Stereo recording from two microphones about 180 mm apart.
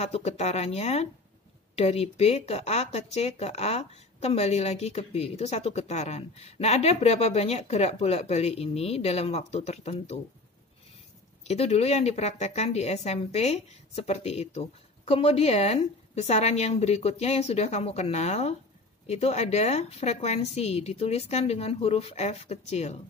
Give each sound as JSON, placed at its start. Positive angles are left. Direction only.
{"t": 0.0, "sound": "speech", "side_deg": 35}
{"t": 11.4, "sound": "speech", "side_deg": 35}